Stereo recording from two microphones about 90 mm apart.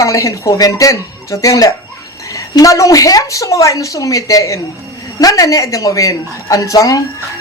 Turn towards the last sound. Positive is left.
turn(degrees=40)  # may be behind; listen again after turning